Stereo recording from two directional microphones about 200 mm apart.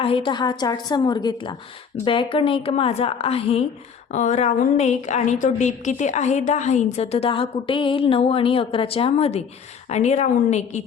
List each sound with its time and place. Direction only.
0.0 s a woman's voice: 25° left (ahead or behind)